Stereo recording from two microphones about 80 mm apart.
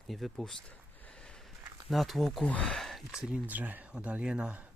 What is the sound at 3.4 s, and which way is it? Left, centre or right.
Speech, right.